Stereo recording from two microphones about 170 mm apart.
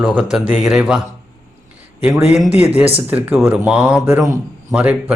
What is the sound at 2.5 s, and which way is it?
Speech, 40° left (ahead or behind).